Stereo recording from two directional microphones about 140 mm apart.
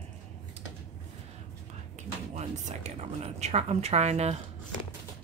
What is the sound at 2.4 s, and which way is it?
A woman's voice, 50° right (ahead or behind).